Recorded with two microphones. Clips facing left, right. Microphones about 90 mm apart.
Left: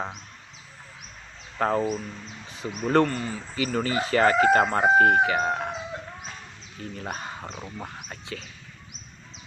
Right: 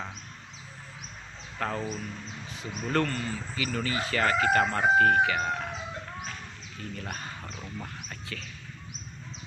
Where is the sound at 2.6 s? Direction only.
45° left (ahead or behind).